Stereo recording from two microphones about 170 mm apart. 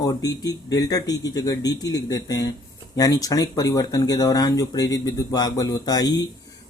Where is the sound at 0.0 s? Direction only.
20° left (ahead or behind).